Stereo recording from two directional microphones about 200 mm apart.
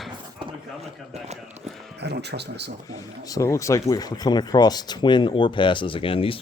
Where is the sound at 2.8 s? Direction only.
15° left (ahead or behind).